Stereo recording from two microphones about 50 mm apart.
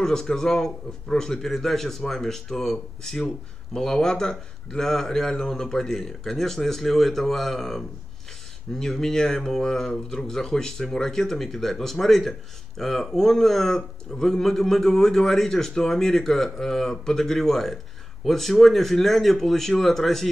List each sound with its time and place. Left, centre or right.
0.0 s speech: centre